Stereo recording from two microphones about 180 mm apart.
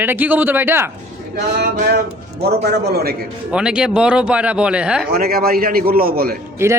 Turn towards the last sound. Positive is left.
turn(degrees=-15)  # may be behind; listen again after turning